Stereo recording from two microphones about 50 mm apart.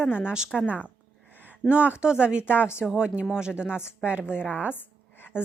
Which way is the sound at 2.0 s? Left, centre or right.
Centre.